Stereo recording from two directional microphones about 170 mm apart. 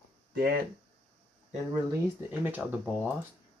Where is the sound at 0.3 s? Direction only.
60° right (ahead or behind).